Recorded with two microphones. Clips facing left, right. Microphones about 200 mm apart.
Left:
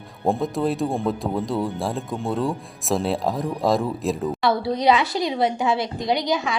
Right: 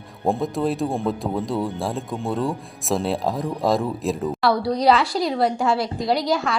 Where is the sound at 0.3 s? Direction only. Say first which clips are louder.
Even; centre (ahead or behind).